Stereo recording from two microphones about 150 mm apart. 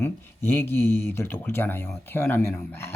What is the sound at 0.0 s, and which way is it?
Speech, 15° left (ahead or behind).